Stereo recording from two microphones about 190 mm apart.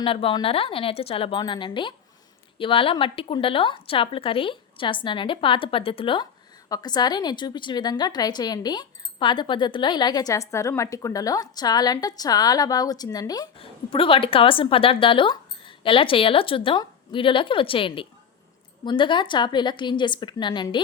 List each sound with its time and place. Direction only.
0.0 s a woman's voice: 30° left (ahead or behind)